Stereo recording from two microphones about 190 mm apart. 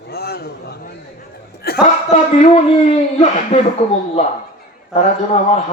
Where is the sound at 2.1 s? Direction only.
35° left (ahead or behind).